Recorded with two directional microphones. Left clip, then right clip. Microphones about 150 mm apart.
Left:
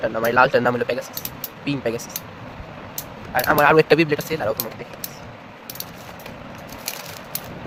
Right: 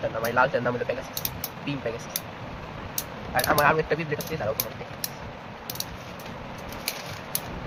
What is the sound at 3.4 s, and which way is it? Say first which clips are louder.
Speech: left 8 dB; 90° left.